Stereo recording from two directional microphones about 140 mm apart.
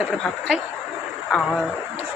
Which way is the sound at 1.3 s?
5° left (ahead or behind).